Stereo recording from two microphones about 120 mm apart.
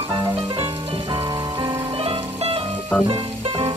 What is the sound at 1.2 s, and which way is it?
Music, 30° right (ahead or behind).